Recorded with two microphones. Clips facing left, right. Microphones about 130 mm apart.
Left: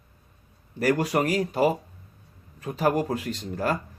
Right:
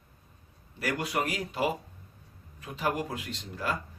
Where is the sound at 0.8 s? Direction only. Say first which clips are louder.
Left 8 dB; 40° left (ahead or behind).